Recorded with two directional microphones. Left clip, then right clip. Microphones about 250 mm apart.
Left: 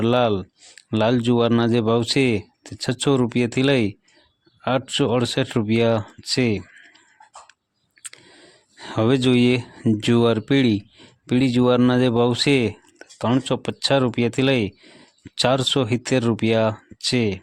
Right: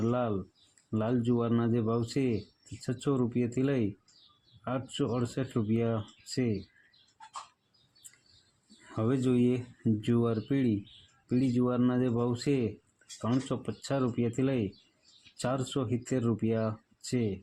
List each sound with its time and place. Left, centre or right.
0.0 s speech: left
8.9 s speech: left